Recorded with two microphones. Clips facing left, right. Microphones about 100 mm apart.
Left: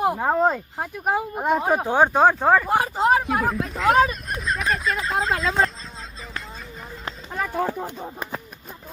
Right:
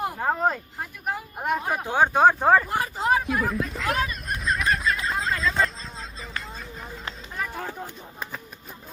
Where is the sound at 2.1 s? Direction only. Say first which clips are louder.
Right 2 dB; centre (ahead or behind).